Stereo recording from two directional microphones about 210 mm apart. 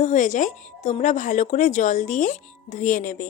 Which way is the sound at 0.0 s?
35° left (ahead or behind).